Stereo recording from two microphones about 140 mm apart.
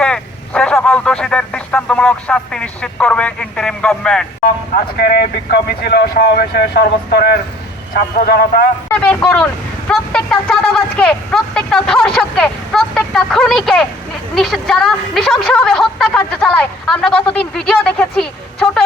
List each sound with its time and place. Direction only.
0.0 s speech: 5° left (ahead or behind)
4.7 s a man's voice: 90° left
7.9 s a man's voice: 90° left
8.9 s a woman's voice: 10° left (ahead or behind)